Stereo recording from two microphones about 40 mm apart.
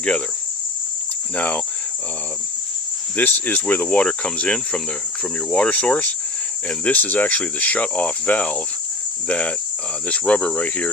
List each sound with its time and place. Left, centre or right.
1.4 s speech: left
3.2 s cricket: left
4.0 s speech: left